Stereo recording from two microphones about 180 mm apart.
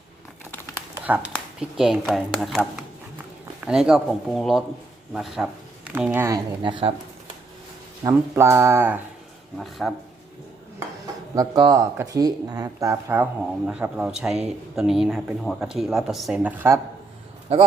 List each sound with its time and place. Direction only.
0.9 s speech: 10° right (ahead or behind)
6.6 s speech: 25° right (ahead or behind)
8.0 s speech: 15° right (ahead or behind)
9.6 s speech: centre (ahead or behind)
10.8 s speech: 20° right (ahead or behind)
17.5 s speech: 35° right (ahead or behind)